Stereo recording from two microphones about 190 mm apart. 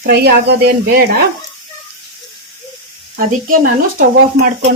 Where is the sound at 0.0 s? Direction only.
55° right (ahead or behind).